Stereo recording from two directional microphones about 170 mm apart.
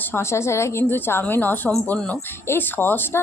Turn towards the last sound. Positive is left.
turn(degrees=10)  # may be behind; listen again after turning